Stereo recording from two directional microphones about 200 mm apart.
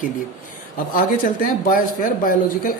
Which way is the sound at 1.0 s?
45° left (ahead or behind).